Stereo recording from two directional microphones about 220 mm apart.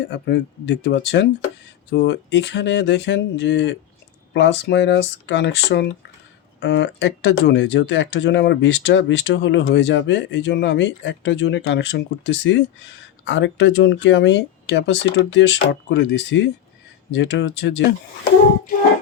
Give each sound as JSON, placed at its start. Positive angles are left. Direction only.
{"t": 0.1, "sound": "speech", "side_deg": 50}